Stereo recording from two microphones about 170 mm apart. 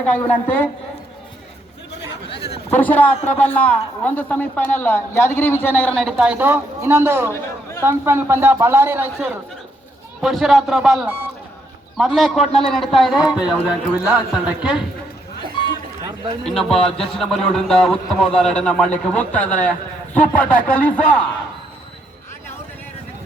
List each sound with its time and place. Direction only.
0.0 s a woman's voice: 10° left (ahead or behind)
2.3 s a sound: 35° left (ahead or behind)
2.7 s a woman's voice: 10° left (ahead or behind); by 14.8 s 5° right (ahead or behind)
16.4 s a man's voice: 5° left (ahead or behind)